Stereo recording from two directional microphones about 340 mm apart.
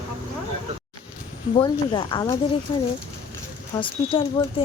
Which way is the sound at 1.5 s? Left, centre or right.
Centre.